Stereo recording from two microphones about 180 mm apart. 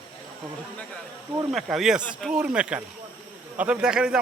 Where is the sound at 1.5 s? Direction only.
Centre (ahead or behind).